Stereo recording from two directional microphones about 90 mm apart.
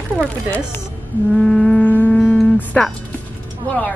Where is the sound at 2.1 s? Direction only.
5° left (ahead or behind).